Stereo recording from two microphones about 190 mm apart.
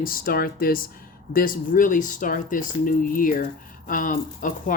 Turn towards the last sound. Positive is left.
turn(degrees=45)  # may be behind; listen again after turning